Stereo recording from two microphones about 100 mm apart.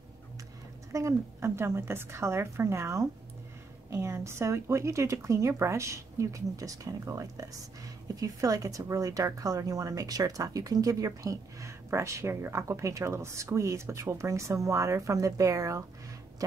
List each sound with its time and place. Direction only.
0.9 s a woman's voice: 30° right (ahead or behind)